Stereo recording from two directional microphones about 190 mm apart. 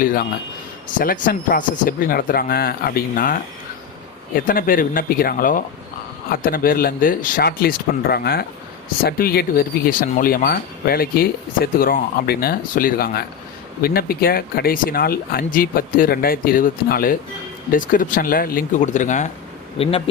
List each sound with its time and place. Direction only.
0.0 s speech: 50° left (ahead or behind)
19.8 s speech: 30° left (ahead or behind)